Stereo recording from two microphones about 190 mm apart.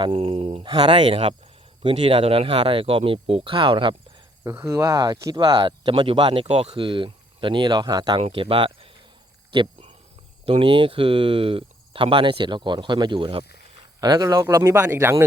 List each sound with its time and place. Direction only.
0.0 s speech: 30° right (ahead or behind)
4.4 s speech: 15° right (ahead or behind)
9.5 s cricket: 25° right (ahead or behind)
10.4 s speech: 30° right (ahead or behind)